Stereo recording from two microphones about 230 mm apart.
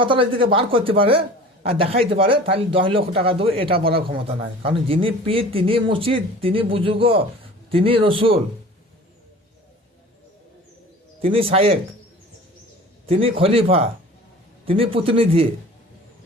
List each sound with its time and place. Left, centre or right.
0.0 s speech: right
11.2 s speech: right
13.1 s speech: right